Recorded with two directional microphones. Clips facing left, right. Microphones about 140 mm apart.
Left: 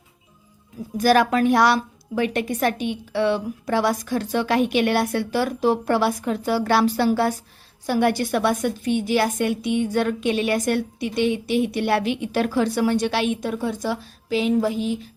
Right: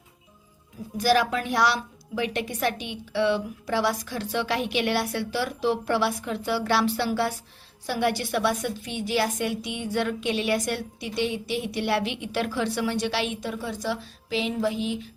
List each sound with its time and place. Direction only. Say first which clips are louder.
0.9 s a woman's voice: left 5 dB; 50° left (ahead or behind)